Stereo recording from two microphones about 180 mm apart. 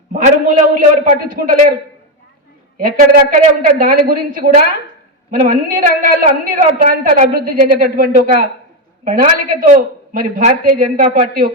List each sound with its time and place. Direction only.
0.1 s a woman's voice: 45° right (ahead or behind)
2.7 s a woman's voice: 50° right (ahead or behind)